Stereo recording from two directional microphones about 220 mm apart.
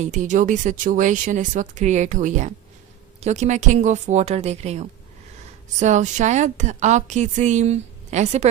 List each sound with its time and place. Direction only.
0.0 s a woman's voice: 35° right (ahead or behind)